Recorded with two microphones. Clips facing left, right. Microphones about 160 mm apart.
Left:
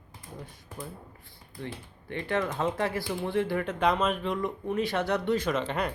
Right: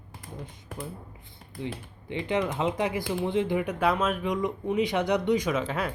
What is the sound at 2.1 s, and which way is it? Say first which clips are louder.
Speech: right 2 dB; 20° right (ahead or behind).